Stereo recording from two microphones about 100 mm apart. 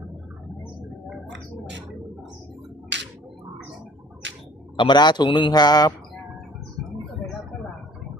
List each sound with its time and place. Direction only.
4.8 s a man's voice: 50° left (ahead or behind)